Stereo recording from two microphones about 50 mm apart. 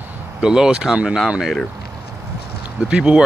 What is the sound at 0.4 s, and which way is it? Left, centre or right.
Speech, centre.